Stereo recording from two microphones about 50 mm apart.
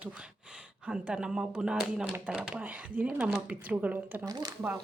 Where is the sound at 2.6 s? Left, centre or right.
Right.